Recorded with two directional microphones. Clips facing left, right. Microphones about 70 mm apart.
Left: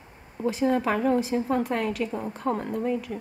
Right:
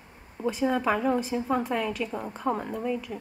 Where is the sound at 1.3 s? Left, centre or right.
Left.